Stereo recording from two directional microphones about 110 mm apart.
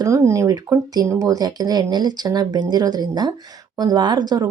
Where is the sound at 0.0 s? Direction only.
30° right (ahead or behind).